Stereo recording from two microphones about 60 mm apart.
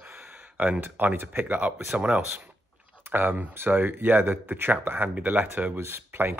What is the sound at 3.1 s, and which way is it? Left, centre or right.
Speech, right.